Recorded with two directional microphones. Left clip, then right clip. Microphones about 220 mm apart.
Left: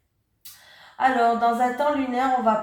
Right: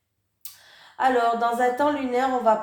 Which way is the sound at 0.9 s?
50° right (ahead or behind).